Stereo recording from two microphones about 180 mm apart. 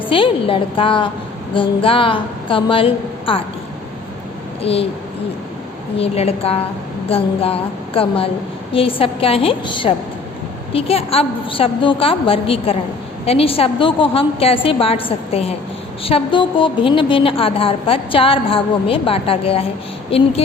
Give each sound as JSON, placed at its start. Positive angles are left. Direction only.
{"t": 0.0, "sound": "a woman's voice", "side_deg": 30}
{"t": 4.6, "sound": "a woman's voice", "side_deg": 35}
{"t": 6.0, "sound": "a woman's voice", "side_deg": 35}